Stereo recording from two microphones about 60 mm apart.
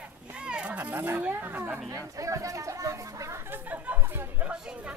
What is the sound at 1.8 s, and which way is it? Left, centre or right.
Speech, right.